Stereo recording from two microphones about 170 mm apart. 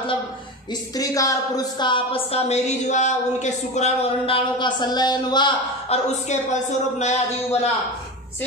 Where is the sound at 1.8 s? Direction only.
35° left (ahead or behind).